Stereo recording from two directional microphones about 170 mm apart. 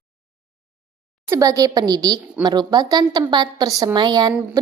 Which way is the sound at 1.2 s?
20° right (ahead or behind).